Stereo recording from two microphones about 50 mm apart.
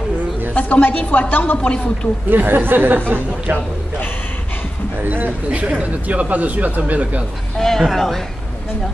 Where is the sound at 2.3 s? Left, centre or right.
Right.